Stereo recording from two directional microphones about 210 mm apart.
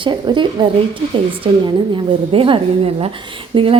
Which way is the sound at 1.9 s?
25° right (ahead or behind).